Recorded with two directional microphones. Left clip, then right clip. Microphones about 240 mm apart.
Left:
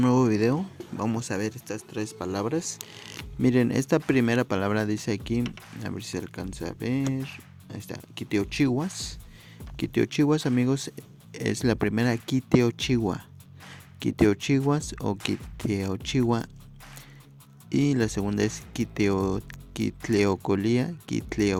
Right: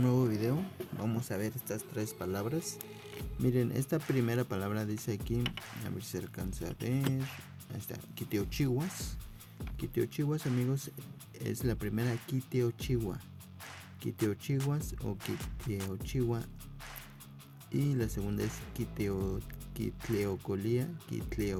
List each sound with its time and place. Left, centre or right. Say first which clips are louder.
0.0 s speech: left 10 dB; left
17.7 s speech: left 11 dB; left